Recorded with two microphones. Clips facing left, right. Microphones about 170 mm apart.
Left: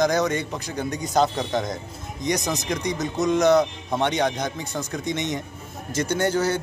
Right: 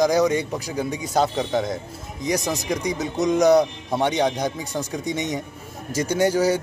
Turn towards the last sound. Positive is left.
turn(degrees=-10)  # may be behind; listen again after turning